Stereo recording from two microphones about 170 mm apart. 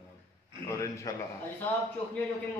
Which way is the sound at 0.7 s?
20° left (ahead or behind).